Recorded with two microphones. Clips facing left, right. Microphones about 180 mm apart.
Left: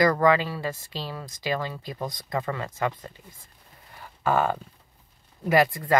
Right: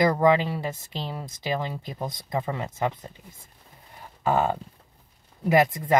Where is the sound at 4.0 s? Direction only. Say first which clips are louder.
Even; 20° right (ahead or behind).